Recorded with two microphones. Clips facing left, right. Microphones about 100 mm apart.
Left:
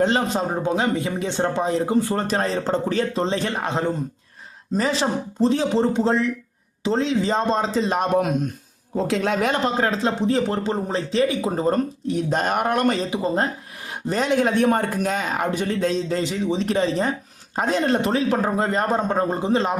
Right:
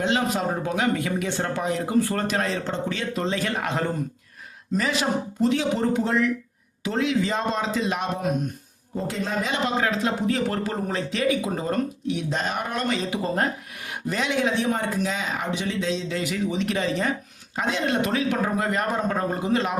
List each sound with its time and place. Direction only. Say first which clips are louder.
0.0 s speech: left 3 dB; 35° left (ahead or behind)
2.2 s speech: left 3 dB; 35° left (ahead or behind)
9.0 s a man's voice: left 6 dB; 90° left
9.5 s speech: left 3 dB; 35° left (ahead or behind); by 13.0 s 55° left (ahead or behind)
13.1 s speech: left 2 dB; 20° left (ahead or behind)
13.9 s speech: left 5 dB; 40° left (ahead or behind)
16.2 s speech: left 3 dB; 30° left (ahead or behind)